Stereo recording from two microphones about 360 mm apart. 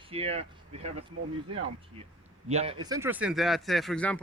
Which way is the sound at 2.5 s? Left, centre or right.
Centre.